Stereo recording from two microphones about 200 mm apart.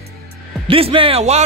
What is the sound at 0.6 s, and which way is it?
Speech, 25° right (ahead or behind).